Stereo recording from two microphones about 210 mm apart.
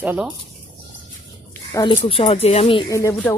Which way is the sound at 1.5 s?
15° left (ahead or behind).